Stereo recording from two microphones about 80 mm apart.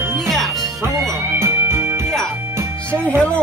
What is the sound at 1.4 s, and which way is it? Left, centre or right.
Music, right.